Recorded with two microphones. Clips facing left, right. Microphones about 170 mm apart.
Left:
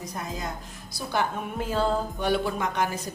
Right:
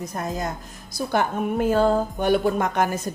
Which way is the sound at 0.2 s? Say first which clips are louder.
Right 6 dB; 45° right (ahead or behind).